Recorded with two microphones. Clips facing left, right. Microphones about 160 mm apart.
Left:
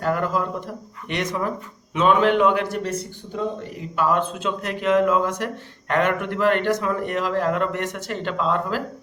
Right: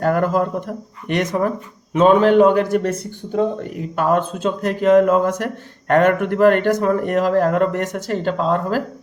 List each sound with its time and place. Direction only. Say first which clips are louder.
0.0 s speech: right 6 dB; 50° right (ahead or behind)
3.9 s speech: right 3 dB; 50° right (ahead or behind)